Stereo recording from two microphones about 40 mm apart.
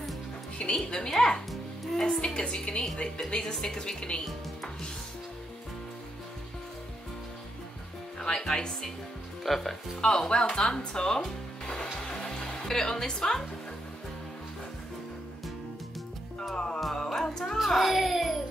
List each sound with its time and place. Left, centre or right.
0.8 s a woman's voice: centre
1.5 s music: centre
2.3 s a woman's voice: left
8.2 s speech: centre
9.4 s speech: centre
10.0 s speech: centre
11.2 s music: centre
16.5 s music: centre
17.6 s baby cry: centre